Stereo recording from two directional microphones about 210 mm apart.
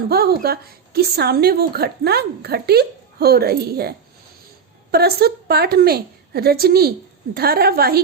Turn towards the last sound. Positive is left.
turn(degrees=-50)  # may be behind; listen again after turning